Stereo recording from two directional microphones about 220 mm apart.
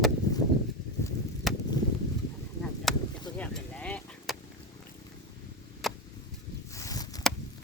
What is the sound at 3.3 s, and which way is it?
Sheep, 5° left (ahead or behind).